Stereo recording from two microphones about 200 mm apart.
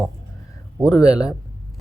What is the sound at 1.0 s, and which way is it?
Speech, 5° right (ahead or behind).